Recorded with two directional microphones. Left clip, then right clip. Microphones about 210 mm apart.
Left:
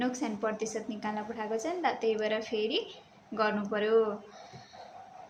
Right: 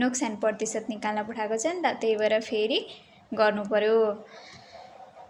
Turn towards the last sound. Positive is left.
turn(degrees=-35)  # may be behind; listen again after turning